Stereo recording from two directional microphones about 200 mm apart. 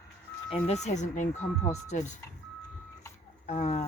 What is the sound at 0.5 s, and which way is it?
Speech, 35° left (ahead or behind).